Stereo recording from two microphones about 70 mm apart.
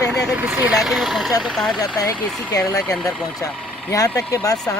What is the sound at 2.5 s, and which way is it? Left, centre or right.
Speech, left.